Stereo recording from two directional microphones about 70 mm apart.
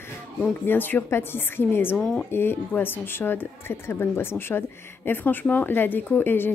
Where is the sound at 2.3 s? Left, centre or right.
Left.